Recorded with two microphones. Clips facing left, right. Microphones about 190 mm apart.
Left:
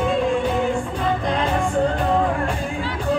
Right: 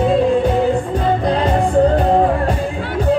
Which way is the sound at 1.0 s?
35° right (ahead or behind).